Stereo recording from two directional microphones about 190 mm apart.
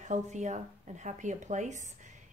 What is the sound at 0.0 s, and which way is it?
A woman's voice, 40° right (ahead or behind).